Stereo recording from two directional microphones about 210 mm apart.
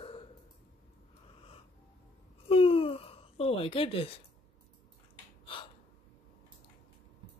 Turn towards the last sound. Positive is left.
turn(degrees=25)  # may be behind; listen again after turning